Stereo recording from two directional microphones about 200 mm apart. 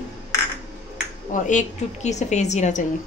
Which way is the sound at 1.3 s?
40° left (ahead or behind).